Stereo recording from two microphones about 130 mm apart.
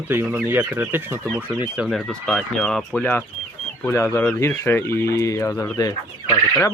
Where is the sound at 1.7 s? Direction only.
5° right (ahead or behind).